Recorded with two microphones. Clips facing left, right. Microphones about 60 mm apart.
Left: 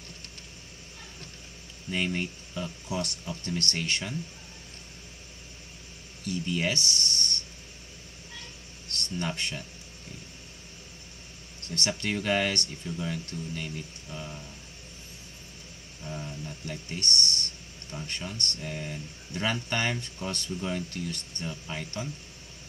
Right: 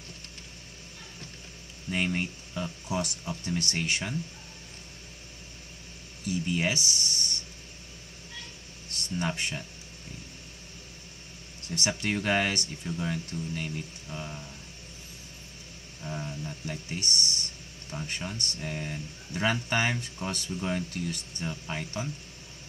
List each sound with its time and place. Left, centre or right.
1.9 s speech: centre
6.5 s speech: centre
8.9 s speech: centre
11.7 s speech: centre
16.0 s speech: centre